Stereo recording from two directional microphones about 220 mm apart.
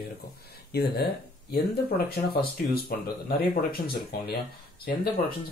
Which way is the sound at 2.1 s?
45° left (ahead or behind).